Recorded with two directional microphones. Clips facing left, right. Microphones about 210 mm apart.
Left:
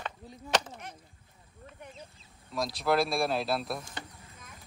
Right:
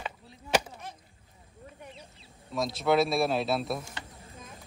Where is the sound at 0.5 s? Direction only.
10° right (ahead or behind).